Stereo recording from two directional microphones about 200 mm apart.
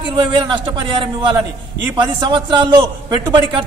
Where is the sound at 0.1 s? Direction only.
25° right (ahead or behind).